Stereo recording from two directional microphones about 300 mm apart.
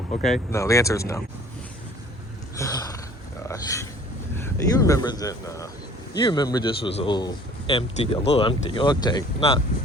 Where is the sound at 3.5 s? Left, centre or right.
Centre.